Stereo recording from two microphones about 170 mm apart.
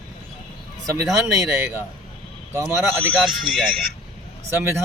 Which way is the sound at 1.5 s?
15° right (ahead or behind).